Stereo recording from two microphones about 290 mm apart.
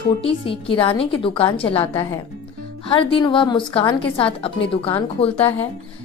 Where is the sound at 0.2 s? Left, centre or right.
Centre.